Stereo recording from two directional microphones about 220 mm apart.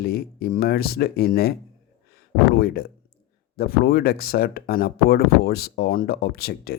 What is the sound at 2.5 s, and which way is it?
Speech, 45° left (ahead or behind).